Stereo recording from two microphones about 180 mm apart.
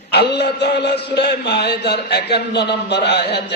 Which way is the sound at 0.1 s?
65° left (ahead or behind).